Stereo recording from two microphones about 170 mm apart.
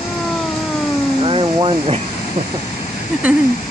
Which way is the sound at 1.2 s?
30° right (ahead or behind).